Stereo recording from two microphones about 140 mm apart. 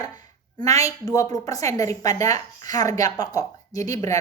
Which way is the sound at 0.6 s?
25° left (ahead or behind).